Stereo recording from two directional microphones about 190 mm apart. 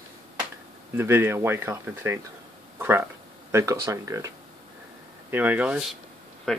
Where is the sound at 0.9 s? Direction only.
10° right (ahead or behind).